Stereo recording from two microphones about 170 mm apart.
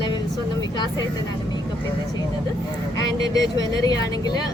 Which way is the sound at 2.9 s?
20° left (ahead or behind).